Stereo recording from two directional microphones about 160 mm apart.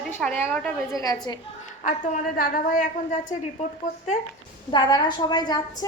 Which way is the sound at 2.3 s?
60° left (ahead or behind).